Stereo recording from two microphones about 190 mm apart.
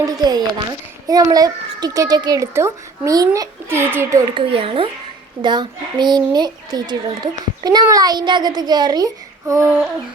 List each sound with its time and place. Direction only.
0.0 s a child's voice: 20° right (ahead or behind)
4.5 s a child's voice: 30° right (ahead or behind)
9.5 s a sound: 15° right (ahead or behind)